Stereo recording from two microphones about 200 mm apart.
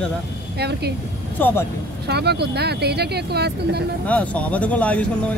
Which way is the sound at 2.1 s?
55° right (ahead or behind).